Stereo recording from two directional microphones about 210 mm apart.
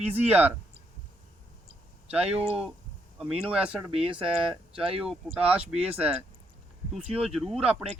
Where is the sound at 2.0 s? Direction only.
5° right (ahead or behind).